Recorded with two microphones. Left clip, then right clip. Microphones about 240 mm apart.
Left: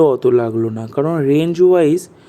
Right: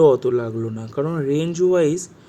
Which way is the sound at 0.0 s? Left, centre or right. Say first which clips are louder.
Left 3 dB; centre.